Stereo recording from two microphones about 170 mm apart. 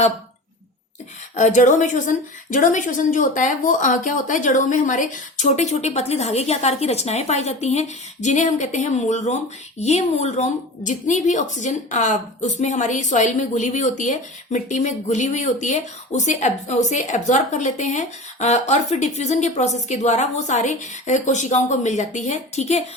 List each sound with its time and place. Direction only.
1.4 s a woman's voice: 45° left (ahead or behind)